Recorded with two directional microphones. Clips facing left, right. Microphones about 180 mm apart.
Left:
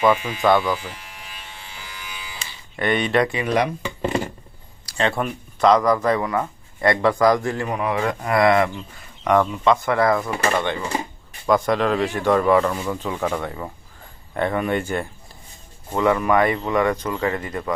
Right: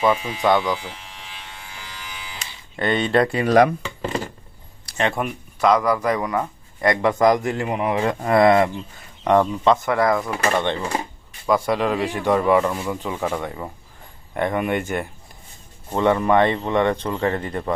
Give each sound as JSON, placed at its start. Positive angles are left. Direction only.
{"t": 0.0, "sound": "a man's voice", "side_deg": -30}
{"t": 0.4, "sound": "speech", "side_deg": -20}
{"t": 2.7, "sound": "a man's voice", "side_deg": -25}
{"t": 3.8, "sound": "chopping", "side_deg": 10}
{"t": 4.9, "sound": "a man's voice", "side_deg": -20}
{"t": 10.2, "sound": "speech", "side_deg": 0}
{"t": 10.6, "sound": "a man's voice", "side_deg": -25}
{"t": 11.4, "sound": "speech", "side_deg": -5}
{"t": 16.0, "sound": "a man's voice", "side_deg": -25}